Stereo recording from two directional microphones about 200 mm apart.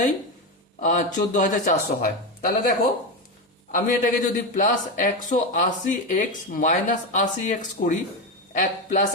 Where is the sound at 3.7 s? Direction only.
40° left (ahead or behind).